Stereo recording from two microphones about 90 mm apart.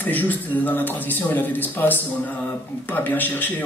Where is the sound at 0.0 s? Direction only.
20° left (ahead or behind).